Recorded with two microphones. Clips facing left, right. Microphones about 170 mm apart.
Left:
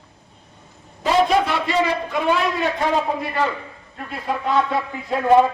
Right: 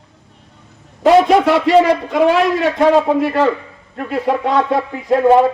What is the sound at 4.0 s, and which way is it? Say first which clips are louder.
Speech: right 9 dB; 70° right (ahead or behind).